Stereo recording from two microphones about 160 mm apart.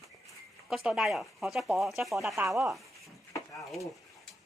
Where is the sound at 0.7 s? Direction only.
5° right (ahead or behind).